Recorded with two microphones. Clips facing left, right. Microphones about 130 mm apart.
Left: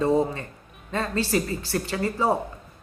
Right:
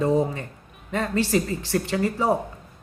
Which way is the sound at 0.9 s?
15° right (ahead or behind).